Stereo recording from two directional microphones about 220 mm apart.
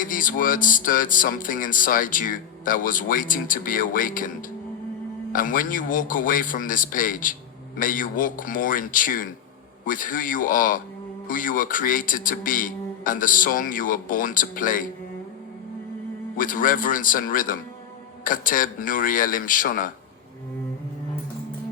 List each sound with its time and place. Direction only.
0.0 s speech: 40° left (ahead or behind)
16.4 s speech: 40° left (ahead or behind)